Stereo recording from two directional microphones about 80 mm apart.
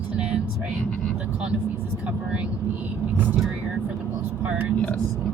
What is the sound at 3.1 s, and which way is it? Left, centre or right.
Speech, right.